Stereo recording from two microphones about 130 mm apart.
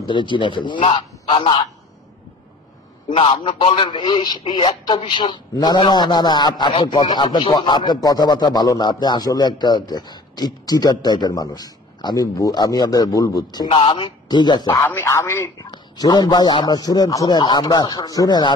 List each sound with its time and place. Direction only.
0.1 s a man's voice: 40° left (ahead or behind)
3.1 s a man's voice: 45° left (ahead or behind)
13.7 s a man's voice: 40° left (ahead or behind)
14.9 s a man's voice: 20° left (ahead or behind)
15.6 s a man's voice: 35° left (ahead or behind)